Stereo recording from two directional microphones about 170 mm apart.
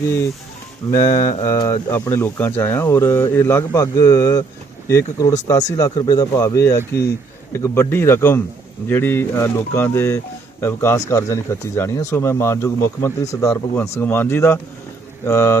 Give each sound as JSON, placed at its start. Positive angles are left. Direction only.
{"t": 0.9, "sound": "speech", "side_deg": 20}